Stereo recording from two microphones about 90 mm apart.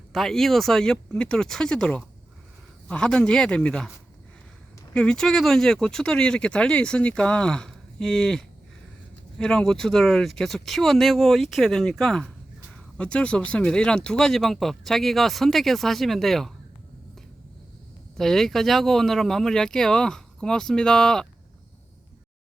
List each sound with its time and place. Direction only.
0.1 s speech: 5° left (ahead or behind)
4.9 s speech: 5° left (ahead or behind)
18.2 s speech: 5° left (ahead or behind)